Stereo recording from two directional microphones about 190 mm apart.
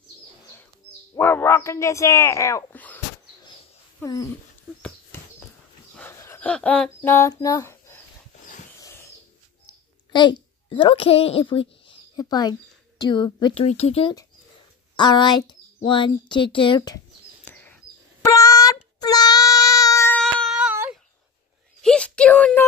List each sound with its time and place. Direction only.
1.1 s a man's voice: 10° left (ahead or behind)
4.0 s a man's voice: 15° left (ahead or behind)
4.7 s a sound: 5° right (ahead or behind)
5.9 s speech: 15° left (ahead or behind)
8.7 s a sound: 15° left (ahead or behind)
9.7 s a woman's voice: 25° left (ahead or behind)
17.5 s chirp: 10° left (ahead or behind)
18.2 s child singing: 15° left (ahead or behind); by 21.0 s 10° right (ahead or behind)
21.8 s a sound: 5° left (ahead or behind)